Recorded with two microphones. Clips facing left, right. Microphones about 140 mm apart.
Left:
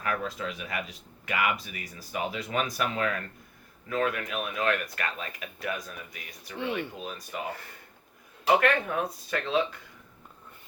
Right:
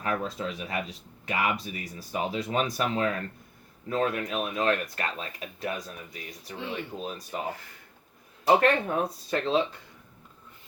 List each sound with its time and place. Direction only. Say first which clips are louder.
0.0 s speech: right 1 dB; 30° right (ahead or behind)
8.4 s speech: right 2 dB; 30° right (ahead or behind)